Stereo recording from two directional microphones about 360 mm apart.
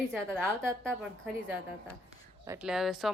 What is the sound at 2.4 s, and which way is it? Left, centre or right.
Speech, centre.